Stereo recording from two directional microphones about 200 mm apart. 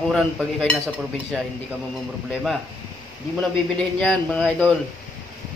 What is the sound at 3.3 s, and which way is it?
A man's voice, 5° left (ahead or behind).